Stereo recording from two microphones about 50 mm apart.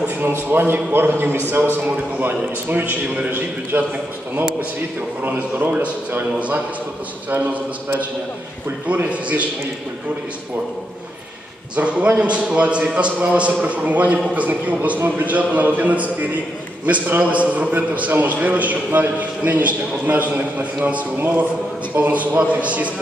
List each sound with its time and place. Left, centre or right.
0.2 s a man's voice: right
5.2 s a man's voice: right
7.2 s a man's voice: right
11.7 s a man's voice: right